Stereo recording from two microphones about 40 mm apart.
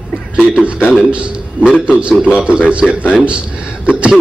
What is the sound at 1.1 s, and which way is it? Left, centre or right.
A man's voice, right.